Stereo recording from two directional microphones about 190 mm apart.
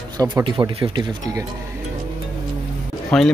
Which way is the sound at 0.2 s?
20° right (ahead or behind).